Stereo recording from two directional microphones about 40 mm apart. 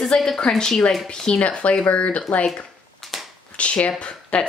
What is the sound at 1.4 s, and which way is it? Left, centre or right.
Speech, left.